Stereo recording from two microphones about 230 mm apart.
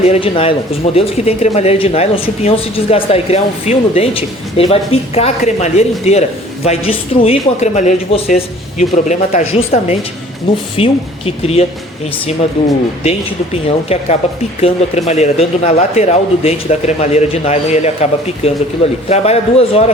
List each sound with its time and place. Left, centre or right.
0.0 s speech: left
13.0 s speech: left